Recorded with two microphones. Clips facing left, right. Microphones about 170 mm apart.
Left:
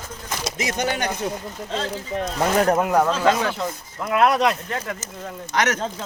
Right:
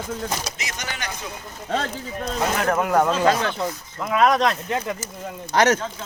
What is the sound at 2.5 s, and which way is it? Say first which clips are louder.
Speech: left 5 dB; 30° left (ahead or behind).